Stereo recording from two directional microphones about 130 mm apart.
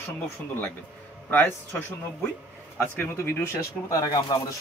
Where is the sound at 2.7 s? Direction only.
15° left (ahead or behind).